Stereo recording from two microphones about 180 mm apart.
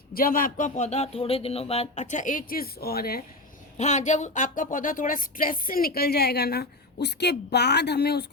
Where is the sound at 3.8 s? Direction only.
40° left (ahead or behind).